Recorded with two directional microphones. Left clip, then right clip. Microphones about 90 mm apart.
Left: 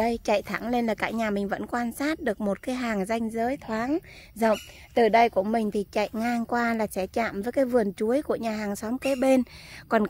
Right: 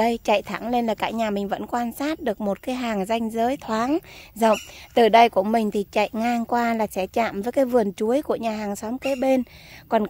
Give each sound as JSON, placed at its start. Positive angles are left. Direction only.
{"t": 0.0, "sound": "speech", "side_deg": -20}
{"t": 3.3, "sound": "speech", "side_deg": -30}
{"t": 8.9, "sound": "speech", "side_deg": 15}